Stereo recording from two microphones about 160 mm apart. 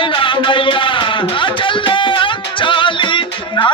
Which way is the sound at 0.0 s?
30° left (ahead or behind).